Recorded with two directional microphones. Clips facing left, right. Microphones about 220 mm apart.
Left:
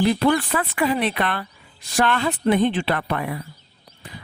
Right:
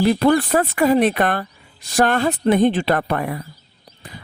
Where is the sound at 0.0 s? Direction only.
45° right (ahead or behind).